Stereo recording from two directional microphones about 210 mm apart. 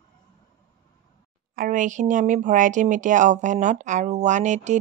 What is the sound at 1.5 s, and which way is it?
Speech, 40° right (ahead or behind).